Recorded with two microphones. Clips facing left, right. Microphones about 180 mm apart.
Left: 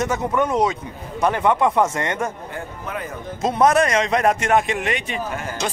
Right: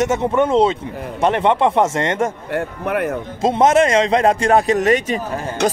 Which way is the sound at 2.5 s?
65° right (ahead or behind).